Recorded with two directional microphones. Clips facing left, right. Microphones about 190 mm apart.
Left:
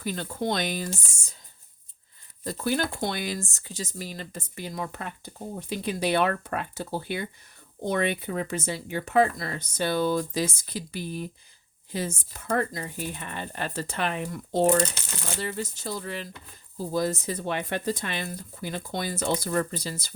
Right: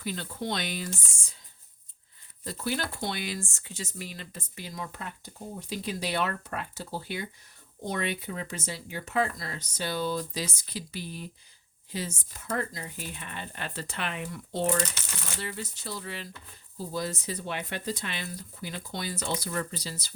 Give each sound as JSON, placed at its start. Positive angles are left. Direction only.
{"t": 0.0, "sound": "speech", "side_deg": 45}
{"t": 2.4, "sound": "speech", "side_deg": 45}